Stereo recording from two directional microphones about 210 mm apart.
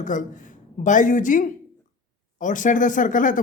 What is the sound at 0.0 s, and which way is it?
Speech, 35° left (ahead or behind).